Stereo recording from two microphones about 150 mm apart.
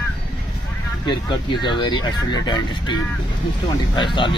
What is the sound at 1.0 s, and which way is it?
Speech, 30° left (ahead or behind).